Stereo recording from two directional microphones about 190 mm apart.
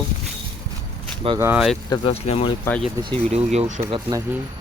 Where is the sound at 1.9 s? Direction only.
30° left (ahead or behind).